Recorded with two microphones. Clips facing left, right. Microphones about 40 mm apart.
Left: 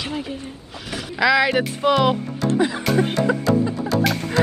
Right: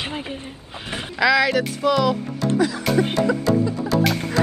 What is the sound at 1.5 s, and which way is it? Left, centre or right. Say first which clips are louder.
Speech: left 1 dB; left.